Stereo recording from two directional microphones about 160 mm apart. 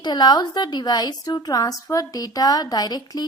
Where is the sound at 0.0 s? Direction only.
25° left (ahead or behind).